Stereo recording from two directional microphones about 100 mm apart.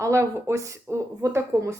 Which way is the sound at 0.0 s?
30° right (ahead or behind).